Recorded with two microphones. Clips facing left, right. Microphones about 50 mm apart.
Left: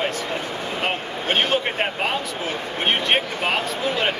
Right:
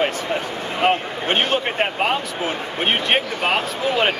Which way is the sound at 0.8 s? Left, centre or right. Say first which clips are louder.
Right 7 dB; centre.